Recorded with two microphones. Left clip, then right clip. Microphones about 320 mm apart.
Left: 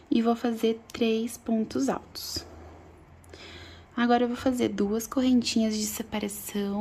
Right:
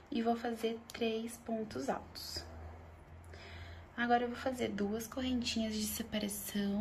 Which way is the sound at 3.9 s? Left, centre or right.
Left.